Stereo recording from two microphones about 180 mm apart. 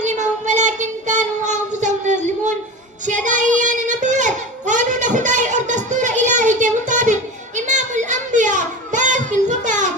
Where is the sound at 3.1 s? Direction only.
45° right (ahead or behind).